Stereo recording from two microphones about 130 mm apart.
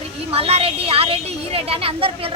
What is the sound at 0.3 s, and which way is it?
A woman's voice, 50° right (ahead or behind).